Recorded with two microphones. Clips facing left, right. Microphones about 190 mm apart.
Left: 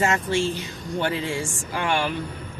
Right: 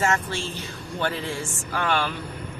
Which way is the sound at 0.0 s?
15° left (ahead or behind).